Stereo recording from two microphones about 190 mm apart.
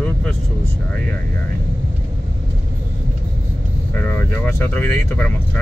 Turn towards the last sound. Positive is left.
turn(degrees=10)  # may be behind; listen again after turning